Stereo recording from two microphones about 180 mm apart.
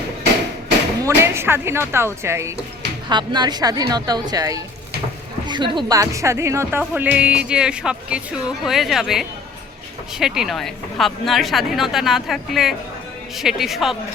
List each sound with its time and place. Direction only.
1.0 s a woman's voice: 15° right (ahead or behind)